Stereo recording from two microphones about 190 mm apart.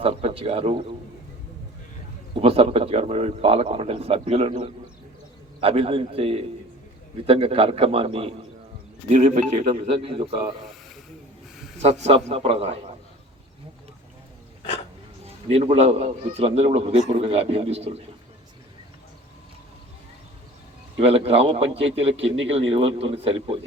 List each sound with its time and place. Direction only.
0.0 s a sound: 30° right (ahead or behind)
2.3 s a man's voice: 30° right (ahead or behind)
11.8 s a man's voice: 35° right (ahead or behind)
15.4 s a man's voice: 30° right (ahead or behind)
21.0 s a man's voice: 30° right (ahead or behind)